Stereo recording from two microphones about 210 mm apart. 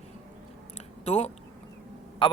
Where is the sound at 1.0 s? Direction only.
30° left (ahead or behind).